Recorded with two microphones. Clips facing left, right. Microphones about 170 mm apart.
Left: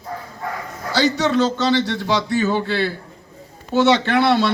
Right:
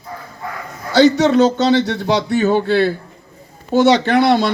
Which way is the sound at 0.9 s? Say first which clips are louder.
Right 7 dB; 50° right (ahead or behind).